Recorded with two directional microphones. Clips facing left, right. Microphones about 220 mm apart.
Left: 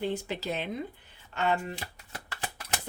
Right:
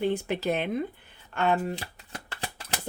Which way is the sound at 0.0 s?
55° right (ahead or behind).